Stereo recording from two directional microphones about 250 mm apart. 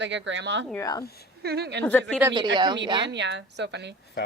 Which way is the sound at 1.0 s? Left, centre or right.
Left.